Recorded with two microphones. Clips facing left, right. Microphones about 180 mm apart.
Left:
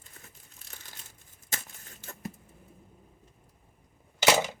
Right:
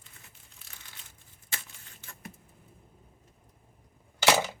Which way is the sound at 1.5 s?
40° left (ahead or behind).